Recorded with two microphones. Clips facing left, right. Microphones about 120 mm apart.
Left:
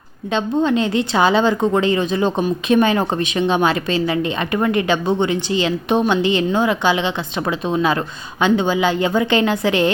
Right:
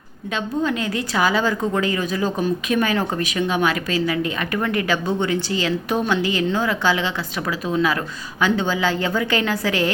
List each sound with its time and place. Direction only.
0.3 s a woman's voice: 30° left (ahead or behind)